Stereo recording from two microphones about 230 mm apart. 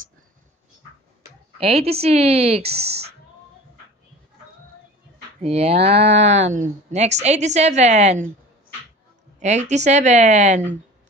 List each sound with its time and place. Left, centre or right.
1.6 s a woman's voice: right
5.4 s a woman's voice: right
9.4 s speech: right